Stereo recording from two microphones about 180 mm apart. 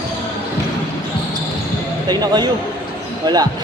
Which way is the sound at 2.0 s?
25° right (ahead or behind).